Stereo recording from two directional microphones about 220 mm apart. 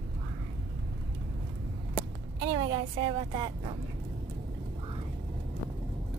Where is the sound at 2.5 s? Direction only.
25° right (ahead or behind).